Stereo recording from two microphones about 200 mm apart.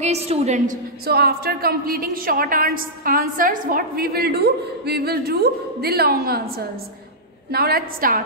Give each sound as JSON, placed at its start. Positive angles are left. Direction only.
{"t": 0.0, "sound": "a woman's voice", "side_deg": -30}
{"t": 1.0, "sound": "a woman's voice", "side_deg": -50}